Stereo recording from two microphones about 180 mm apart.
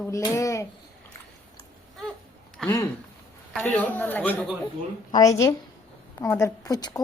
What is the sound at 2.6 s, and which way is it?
A child's voice, centre (ahead or behind).